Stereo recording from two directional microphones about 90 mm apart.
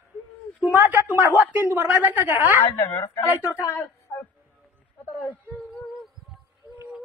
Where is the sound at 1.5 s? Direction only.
15° right (ahead or behind).